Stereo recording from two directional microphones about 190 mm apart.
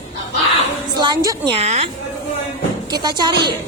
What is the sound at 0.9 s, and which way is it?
Speech, 20° right (ahead or behind).